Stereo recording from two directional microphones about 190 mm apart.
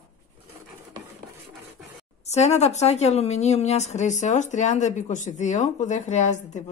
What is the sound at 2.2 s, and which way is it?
A woman's voice, 35° left (ahead or behind).